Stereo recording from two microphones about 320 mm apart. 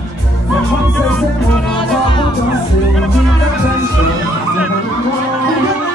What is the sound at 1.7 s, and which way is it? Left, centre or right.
Music, centre.